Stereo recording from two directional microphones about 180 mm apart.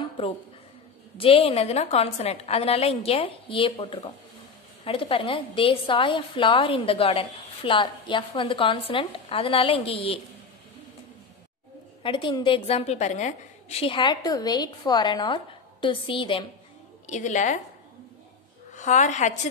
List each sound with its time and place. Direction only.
1.1 s a woman's voice: 30° left (ahead or behind)
12.0 s a woman's voice: 30° left (ahead or behind)
17.0 s a woman's voice: 40° left (ahead or behind)
18.8 s a woman's voice: 40° left (ahead or behind)